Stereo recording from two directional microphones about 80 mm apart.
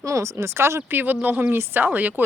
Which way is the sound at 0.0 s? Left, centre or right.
Right.